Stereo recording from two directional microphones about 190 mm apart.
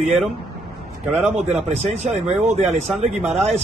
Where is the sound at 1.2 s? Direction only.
Centre (ahead or behind).